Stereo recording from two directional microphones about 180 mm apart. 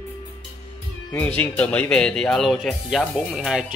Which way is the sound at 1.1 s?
10° left (ahead or behind).